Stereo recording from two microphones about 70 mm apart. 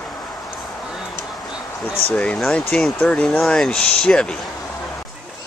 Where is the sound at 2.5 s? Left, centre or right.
Centre.